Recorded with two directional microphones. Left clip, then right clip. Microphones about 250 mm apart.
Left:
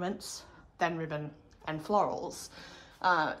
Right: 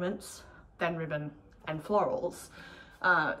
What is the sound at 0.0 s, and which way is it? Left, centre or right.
A woman's voice, centre.